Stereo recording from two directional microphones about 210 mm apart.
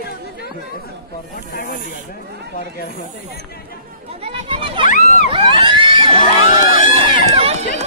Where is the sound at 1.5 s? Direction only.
40° left (ahead or behind).